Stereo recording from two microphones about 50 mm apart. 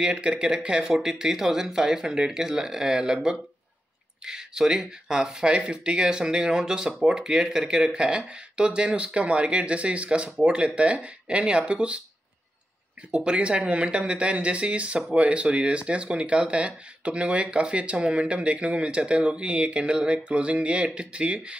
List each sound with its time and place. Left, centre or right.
0.0 s speech: right
13.1 s speech: right